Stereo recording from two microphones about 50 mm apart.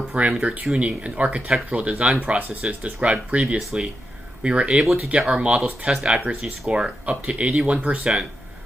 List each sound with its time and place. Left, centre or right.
0.1 s speech: centre